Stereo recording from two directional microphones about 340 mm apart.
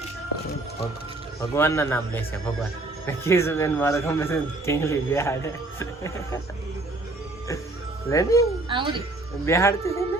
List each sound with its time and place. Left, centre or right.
1.4 s speech: centre
8.1 s speech: centre
8.7 s speech: centre
9.5 s speech: centre